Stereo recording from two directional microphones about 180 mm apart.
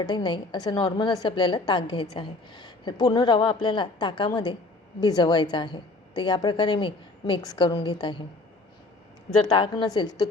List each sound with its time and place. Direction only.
0.0 s a woman's voice: 25° left (ahead or behind)
9.5 s a woman's voice: 25° left (ahead or behind)